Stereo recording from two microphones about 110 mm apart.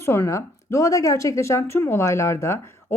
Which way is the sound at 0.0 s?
25° left (ahead or behind).